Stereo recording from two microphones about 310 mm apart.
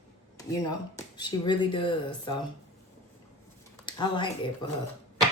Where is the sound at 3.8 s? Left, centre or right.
Centre.